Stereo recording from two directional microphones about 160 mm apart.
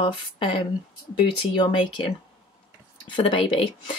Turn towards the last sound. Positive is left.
turn(degrees=30)  # may be behind; listen again after turning